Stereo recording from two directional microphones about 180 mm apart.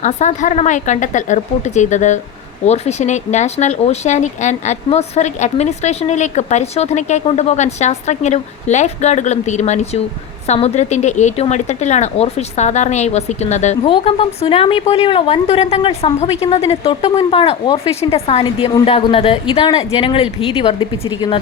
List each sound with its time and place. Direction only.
0.0 s a woman's voice: 40° left (ahead or behind)